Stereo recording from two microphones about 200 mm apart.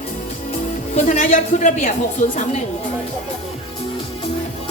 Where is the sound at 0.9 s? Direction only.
35° left (ahead or behind).